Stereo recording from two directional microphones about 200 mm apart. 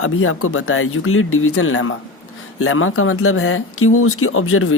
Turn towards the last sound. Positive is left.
turn(degrees=90)